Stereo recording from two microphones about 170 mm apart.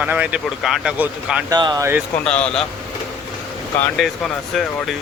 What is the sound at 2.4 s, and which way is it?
Speech, 5° left (ahead or behind).